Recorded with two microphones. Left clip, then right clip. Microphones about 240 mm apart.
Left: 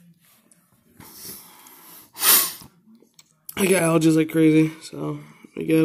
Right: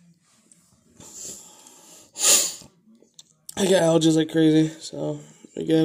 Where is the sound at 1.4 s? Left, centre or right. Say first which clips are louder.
Left 1 dB; centre.